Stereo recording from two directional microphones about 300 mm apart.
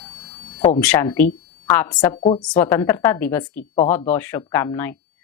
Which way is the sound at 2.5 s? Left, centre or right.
Centre.